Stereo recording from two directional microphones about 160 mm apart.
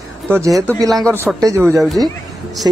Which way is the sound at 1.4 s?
20° right (ahead or behind).